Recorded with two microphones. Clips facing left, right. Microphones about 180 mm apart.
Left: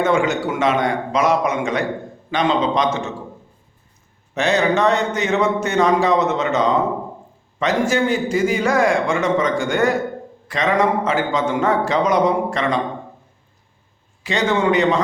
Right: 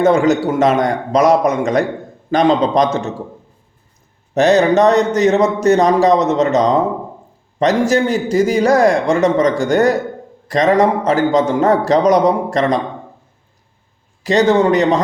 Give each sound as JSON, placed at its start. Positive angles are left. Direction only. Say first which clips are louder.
{"t": 0.0, "sound": "speech", "louder": "right 6 dB", "side_deg": -40}
{"t": 4.4, "sound": "speech", "louder": "right 7 dB", "side_deg": -40}
{"t": 14.3, "sound": "speech", "louder": "right 6 dB", "side_deg": -40}